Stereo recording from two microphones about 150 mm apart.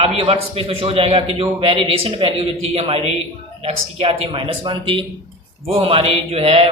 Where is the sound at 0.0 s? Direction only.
40° right (ahead or behind).